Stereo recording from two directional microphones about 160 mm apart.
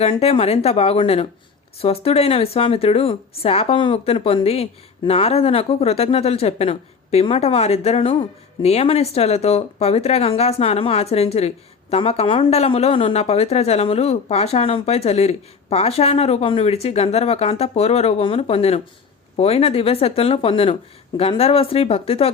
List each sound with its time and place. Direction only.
0.0 s a woman's voice: 40° left (ahead or behind)